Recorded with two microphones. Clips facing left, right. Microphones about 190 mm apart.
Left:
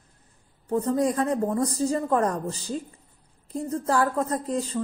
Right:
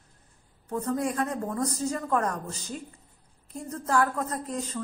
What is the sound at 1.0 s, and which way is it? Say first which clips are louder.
A man's voice: left 6 dB; 25° left (ahead or behind).